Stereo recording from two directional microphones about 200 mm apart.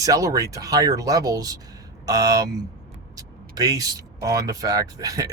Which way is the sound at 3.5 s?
20° right (ahead or behind).